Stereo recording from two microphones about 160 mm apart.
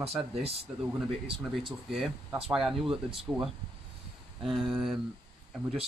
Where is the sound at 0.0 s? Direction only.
35° right (ahead or behind).